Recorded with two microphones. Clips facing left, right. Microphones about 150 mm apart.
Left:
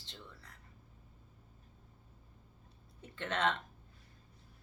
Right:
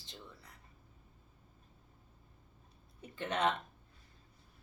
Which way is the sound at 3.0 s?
15° right (ahead or behind).